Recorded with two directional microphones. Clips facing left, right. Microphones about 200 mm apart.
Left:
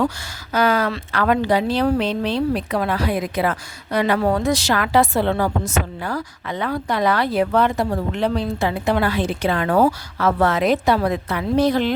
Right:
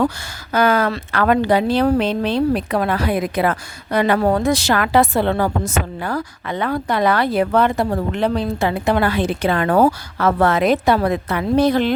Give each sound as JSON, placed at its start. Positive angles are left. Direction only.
{"t": 0.5, "sound": "speech", "side_deg": -55}